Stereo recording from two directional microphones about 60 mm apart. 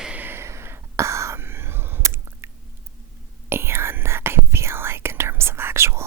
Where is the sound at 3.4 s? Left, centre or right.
Right.